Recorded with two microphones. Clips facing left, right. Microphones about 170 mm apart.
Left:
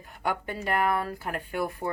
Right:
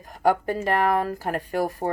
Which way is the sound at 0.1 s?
40° right (ahead or behind).